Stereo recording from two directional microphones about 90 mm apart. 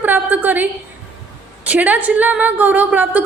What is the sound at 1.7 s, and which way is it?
A woman's voice, 20° right (ahead or behind).